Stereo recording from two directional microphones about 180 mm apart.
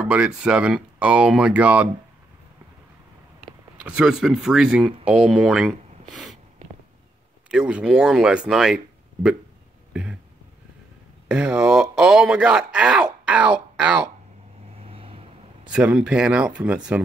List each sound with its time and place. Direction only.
0.0 s speech: 5° right (ahead or behind)
3.7 s speech: 5° right (ahead or behind)
7.5 s speech: 5° right (ahead or behind)
11.2 s speech: 5° right (ahead or behind)
14.8 s a sound: 30° right (ahead or behind)
15.7 s speech: 5° right (ahead or behind)